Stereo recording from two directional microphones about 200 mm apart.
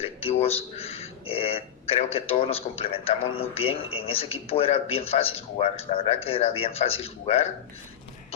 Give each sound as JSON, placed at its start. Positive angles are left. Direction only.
{"t": 0.0, "sound": "a man's voice", "side_deg": 30}